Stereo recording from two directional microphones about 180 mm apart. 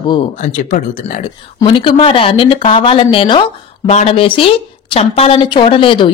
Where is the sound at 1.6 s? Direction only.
25° left (ahead or behind).